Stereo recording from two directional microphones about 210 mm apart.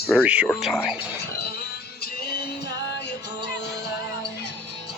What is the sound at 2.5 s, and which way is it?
Music, 55° left (ahead or behind).